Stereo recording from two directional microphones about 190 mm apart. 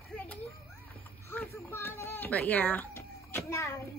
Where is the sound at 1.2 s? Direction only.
10° left (ahead or behind).